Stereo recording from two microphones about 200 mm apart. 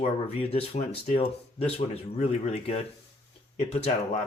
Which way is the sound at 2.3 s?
35° left (ahead or behind).